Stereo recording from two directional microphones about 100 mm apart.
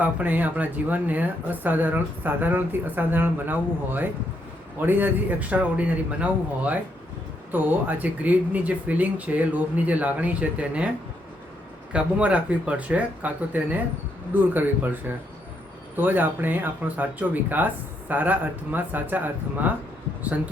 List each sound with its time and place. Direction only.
0.0 s speech: 15° right (ahead or behind)
7.5 s speech: 15° right (ahead or behind)
11.9 s speech: 10° right (ahead or behind)